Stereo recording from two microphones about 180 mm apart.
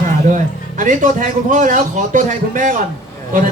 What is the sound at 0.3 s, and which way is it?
Speech, 45° right (ahead or behind).